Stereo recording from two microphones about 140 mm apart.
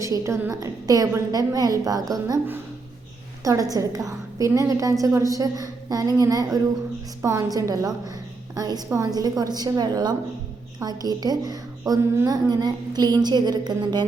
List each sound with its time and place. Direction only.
0.0 s a woman's voice: 20° right (ahead or behind)
3.4 s a woman's voice: 25° right (ahead or behind)